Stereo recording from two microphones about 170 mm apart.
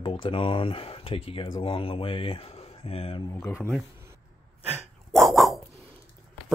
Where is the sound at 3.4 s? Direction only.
15° left (ahead or behind).